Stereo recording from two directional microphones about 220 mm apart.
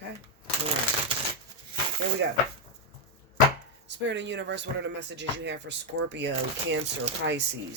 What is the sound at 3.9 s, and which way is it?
Speech, 55° right (ahead or behind).